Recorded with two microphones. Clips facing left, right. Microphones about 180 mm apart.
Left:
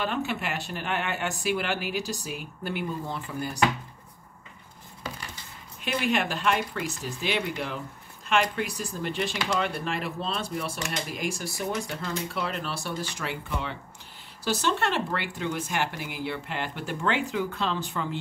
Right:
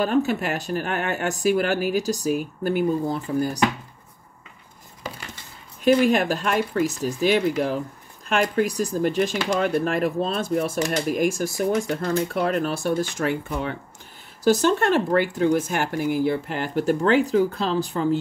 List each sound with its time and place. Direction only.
0.0 s speech: 40° right (ahead or behind)
5.9 s speech: 40° right (ahead or behind)